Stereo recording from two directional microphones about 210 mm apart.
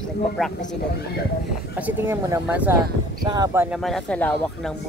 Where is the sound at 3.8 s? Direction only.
5° left (ahead or behind).